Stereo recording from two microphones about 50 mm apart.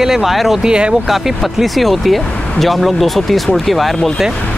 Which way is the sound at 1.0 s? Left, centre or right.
Centre.